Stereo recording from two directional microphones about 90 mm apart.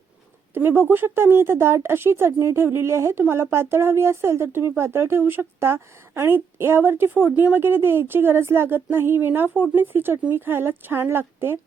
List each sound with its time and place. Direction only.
0.5 s speech: 25° right (ahead or behind)